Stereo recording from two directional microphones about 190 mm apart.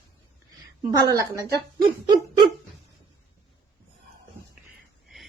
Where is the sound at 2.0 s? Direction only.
20° right (ahead or behind).